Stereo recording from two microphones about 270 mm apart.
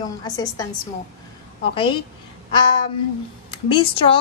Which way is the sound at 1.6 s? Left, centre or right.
Centre.